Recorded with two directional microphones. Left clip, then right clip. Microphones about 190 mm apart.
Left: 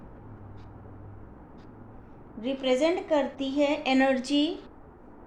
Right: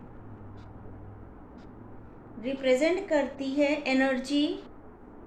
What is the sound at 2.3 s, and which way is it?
A woman's voice, 25° left (ahead or behind).